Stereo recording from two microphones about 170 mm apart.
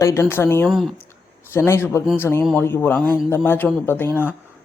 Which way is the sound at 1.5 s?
15° left (ahead or behind).